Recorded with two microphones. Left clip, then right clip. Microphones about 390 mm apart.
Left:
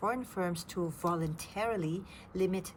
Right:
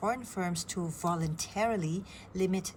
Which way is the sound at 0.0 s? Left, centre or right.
Centre.